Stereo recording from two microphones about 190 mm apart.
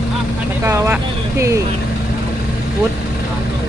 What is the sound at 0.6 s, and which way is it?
Vehicle, 15° right (ahead or behind).